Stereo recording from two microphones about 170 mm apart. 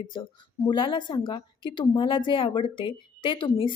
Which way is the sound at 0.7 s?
30° left (ahead or behind).